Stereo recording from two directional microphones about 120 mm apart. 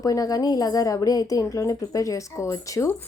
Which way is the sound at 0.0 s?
30° left (ahead or behind).